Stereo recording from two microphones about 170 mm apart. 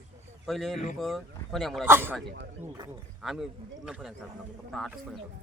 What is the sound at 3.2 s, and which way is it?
Speech, centre (ahead or behind).